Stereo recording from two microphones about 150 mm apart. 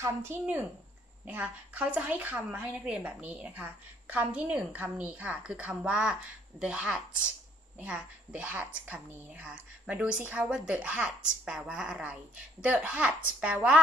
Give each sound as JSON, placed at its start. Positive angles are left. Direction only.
{"t": 0.0, "sound": "a woman's voice", "side_deg": -15}